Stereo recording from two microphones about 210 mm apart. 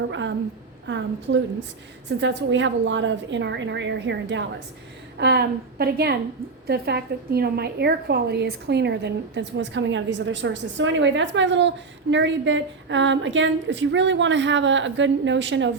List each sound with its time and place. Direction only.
0.1 s a woman's voice: 60° right (ahead or behind)